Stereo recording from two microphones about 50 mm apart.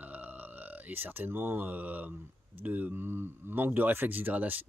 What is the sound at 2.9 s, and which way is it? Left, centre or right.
Speech, right.